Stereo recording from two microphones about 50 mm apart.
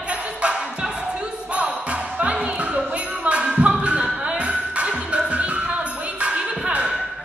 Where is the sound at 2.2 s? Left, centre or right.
Right.